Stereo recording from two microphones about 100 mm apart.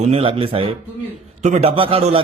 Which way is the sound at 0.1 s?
65° right (ahead or behind).